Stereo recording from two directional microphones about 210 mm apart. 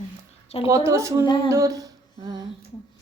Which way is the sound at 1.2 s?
20° left (ahead or behind).